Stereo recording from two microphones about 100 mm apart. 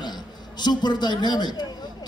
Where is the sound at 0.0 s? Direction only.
45° left (ahead or behind).